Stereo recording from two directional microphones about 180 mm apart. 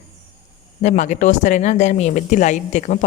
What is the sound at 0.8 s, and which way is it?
Speech, 40° left (ahead or behind).